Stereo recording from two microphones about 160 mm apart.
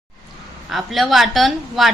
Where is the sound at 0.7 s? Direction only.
Centre (ahead or behind).